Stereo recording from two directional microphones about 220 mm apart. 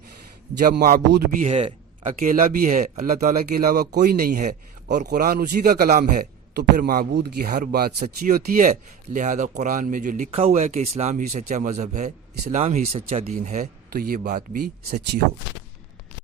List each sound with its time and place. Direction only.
0.6 s a man's voice: 40° right (ahead or behind)